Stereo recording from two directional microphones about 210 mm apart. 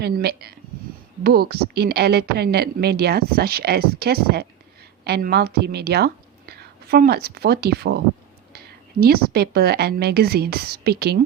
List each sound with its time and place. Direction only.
0.0 s a woman's voice: 50° right (ahead or behind)